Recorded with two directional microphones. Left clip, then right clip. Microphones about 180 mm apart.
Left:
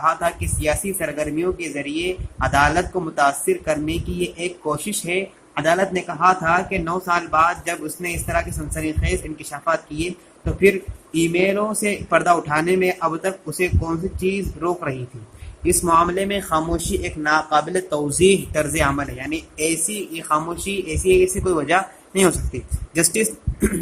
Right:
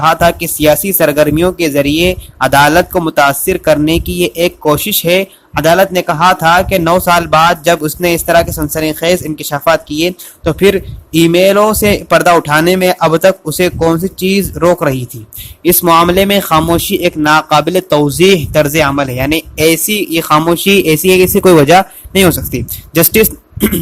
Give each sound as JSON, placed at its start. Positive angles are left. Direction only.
{"t": 0.0, "sound": "speech", "side_deg": -55}